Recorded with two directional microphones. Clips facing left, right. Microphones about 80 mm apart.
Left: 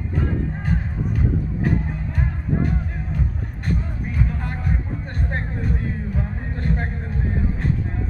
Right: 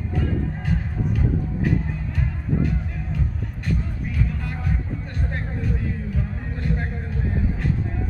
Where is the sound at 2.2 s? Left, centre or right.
Left.